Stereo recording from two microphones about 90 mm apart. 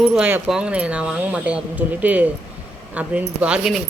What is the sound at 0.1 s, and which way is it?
Speech, 20° right (ahead or behind).